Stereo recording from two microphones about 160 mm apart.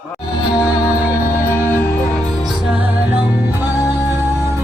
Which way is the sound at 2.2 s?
Centre (ahead or behind).